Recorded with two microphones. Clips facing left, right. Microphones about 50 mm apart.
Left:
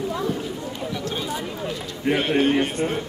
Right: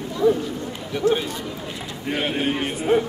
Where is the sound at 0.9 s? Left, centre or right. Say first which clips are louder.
Right 11 dB; right.